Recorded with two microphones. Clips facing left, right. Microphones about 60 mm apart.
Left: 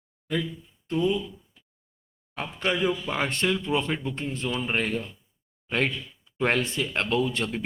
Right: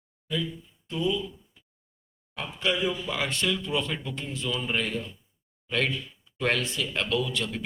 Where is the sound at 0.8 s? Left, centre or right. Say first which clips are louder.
Left 3 dB; left.